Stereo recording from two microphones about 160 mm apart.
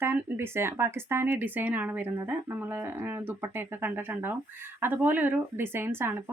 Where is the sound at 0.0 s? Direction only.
15° right (ahead or behind).